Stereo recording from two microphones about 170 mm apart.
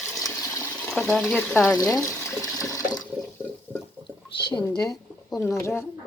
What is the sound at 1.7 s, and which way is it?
Water, 20° left (ahead or behind).